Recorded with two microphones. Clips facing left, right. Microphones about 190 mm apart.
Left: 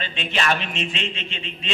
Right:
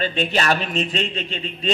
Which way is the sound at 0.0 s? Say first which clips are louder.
Right 5 dB; 40° right (ahead or behind).